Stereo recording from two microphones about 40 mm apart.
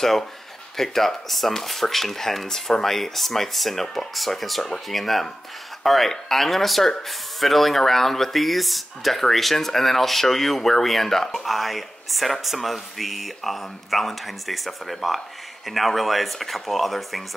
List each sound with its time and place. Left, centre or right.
0.7 s speech: centre